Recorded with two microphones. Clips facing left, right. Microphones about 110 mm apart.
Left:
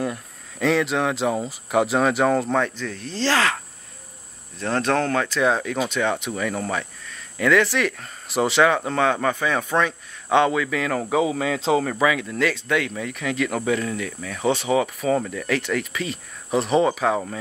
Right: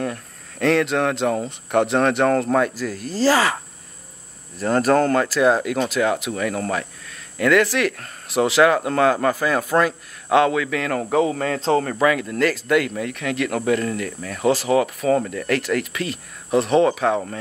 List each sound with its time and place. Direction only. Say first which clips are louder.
0.0 s speech: even; centre (ahead or behind)